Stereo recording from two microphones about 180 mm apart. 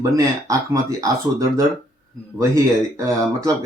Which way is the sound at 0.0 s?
20° right (ahead or behind).